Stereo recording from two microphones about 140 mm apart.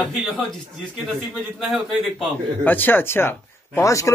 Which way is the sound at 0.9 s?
Centre (ahead or behind).